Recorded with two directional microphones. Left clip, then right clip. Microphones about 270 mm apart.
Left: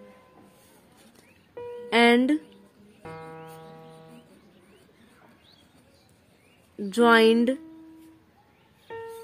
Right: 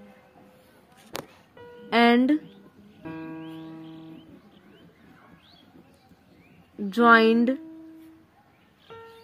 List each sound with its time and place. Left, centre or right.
1.9 s music: centre
6.9 s a woman's voice: centre